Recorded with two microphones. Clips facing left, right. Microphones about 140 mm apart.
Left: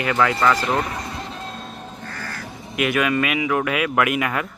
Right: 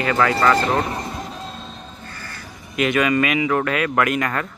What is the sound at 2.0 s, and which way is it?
Crow, 60° left (ahead or behind).